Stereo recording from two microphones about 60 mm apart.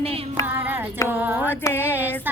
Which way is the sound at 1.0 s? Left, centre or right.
Right.